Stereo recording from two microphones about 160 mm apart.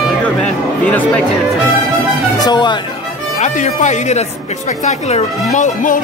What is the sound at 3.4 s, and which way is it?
Speech, 50° left (ahead or behind).